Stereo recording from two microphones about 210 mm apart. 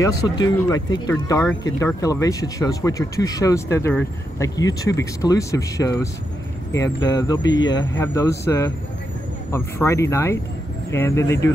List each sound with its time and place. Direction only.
0.0 s speech: 15° left (ahead or behind)
7.1 s speech: 20° left (ahead or behind)